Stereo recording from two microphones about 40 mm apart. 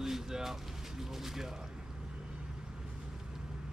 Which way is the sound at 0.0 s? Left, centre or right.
Centre.